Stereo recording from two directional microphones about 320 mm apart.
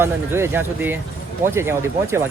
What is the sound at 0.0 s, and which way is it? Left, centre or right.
Speech, centre.